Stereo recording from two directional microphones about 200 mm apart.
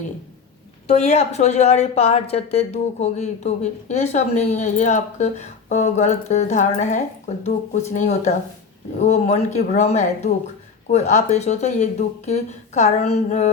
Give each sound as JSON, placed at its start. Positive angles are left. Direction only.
{"t": 0.9, "sound": "a woman's voice", "side_deg": 35}